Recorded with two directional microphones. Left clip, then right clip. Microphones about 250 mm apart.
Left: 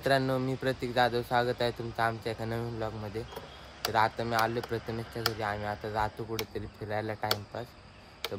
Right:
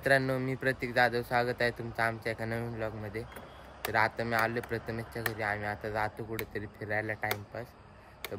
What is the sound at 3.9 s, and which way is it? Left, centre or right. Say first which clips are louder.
Speech: left 1 dB; centre.